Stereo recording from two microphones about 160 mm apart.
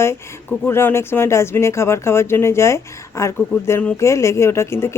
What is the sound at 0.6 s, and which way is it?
Speech, 15° left (ahead or behind).